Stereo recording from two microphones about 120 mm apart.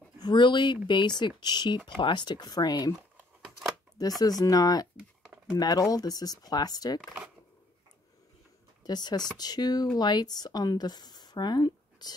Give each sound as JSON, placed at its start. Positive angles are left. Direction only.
{"t": 0.2, "sound": "speech", "side_deg": 40}
{"t": 3.4, "sound": "a sound", "side_deg": -5}
{"t": 4.2, "sound": "speech", "side_deg": 30}
{"t": 4.9, "sound": "a sound", "side_deg": -10}
{"t": 5.5, "sound": "speech", "side_deg": 35}
{"t": 8.8, "sound": "speech", "side_deg": 35}